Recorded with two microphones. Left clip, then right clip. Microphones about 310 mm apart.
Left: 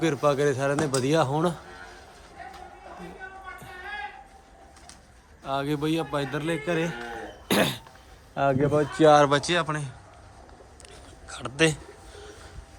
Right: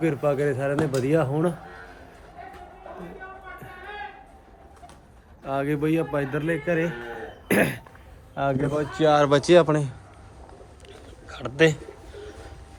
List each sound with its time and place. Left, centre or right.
0.0 s a man's voice: centre
5.5 s a man's voice: centre
7.4 s cough: centre
8.4 s speech: left
9.4 s a man's voice: centre
10.8 s pigeon: centre